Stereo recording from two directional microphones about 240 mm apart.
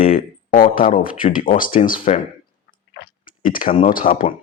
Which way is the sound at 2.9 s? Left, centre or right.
Left.